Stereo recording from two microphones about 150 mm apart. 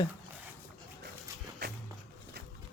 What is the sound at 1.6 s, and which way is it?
Walk, 90° right.